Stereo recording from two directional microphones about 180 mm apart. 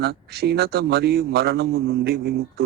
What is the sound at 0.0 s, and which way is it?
Speech, 65° right (ahead or behind).